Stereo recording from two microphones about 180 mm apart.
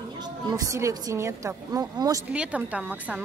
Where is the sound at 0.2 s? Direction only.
20° right (ahead or behind).